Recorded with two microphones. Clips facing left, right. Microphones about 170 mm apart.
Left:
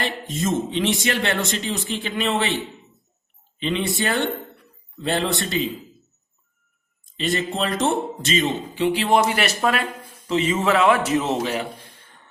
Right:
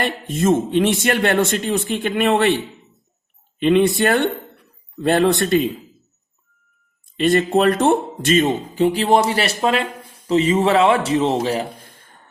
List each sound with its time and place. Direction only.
0.0 s speech: 55° right (ahead or behind)
3.6 s speech: 55° right (ahead or behind)
7.0 s a man's voice: 55° right (ahead or behind); by 11.6 s 35° right (ahead or behind)
11.9 s a sound: 45° right (ahead or behind)